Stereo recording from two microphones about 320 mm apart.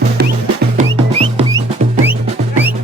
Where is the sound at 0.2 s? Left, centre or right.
Right.